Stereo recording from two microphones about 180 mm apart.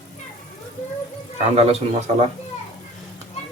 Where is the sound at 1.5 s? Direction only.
35° right (ahead or behind).